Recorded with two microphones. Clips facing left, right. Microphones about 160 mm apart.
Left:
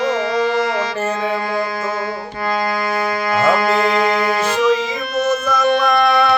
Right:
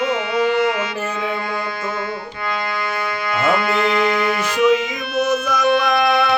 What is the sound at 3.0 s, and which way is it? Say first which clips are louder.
Music: left 4 dB; 40° left (ahead or behind).